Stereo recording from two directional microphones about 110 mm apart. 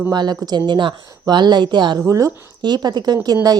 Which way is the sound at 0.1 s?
40° right (ahead or behind).